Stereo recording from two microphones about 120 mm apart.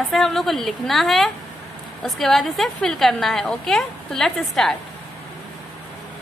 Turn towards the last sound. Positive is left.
turn(degrees=0)  # may be behind; listen again after turning